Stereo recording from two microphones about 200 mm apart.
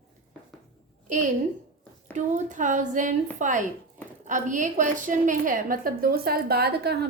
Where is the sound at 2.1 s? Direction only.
40° right (ahead or behind).